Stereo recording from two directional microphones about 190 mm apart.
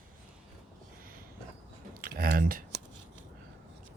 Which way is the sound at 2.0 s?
50° right (ahead or behind).